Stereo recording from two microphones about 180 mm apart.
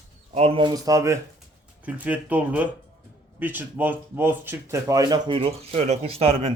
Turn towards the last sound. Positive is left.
turn(degrees=-35)  # may be behind; listen again after turning